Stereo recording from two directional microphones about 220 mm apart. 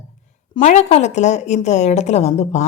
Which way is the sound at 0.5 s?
30° left (ahead or behind).